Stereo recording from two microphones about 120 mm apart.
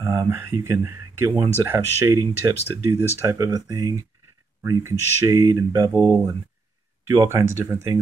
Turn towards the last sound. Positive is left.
turn(degrees=-20)  # may be behind; listen again after turning